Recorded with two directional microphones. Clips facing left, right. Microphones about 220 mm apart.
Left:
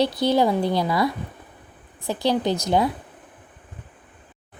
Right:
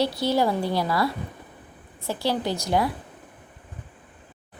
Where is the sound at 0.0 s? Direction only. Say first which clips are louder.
Left 3 dB; 20° left (ahead or behind).